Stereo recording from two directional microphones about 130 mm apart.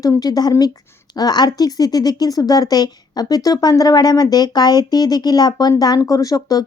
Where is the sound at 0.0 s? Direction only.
30° left (ahead or behind).